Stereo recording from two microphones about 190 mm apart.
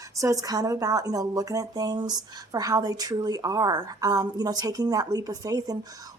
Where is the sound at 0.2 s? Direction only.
15° right (ahead or behind).